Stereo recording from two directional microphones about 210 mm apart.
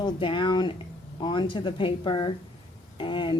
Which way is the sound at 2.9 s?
25° left (ahead or behind).